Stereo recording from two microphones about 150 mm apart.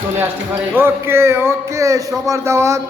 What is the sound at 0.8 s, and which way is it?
Speech, 15° right (ahead or behind).